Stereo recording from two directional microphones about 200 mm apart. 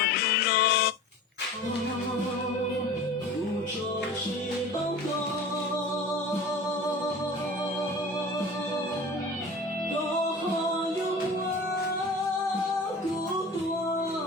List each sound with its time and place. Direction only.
0.0 s music: 50° left (ahead or behind)